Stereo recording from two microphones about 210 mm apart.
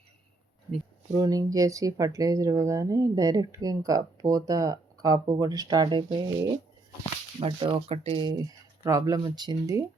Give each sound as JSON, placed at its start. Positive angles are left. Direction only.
{"t": 1.1, "sound": "speech", "side_deg": -15}
{"t": 7.3, "sound": "speech", "side_deg": -25}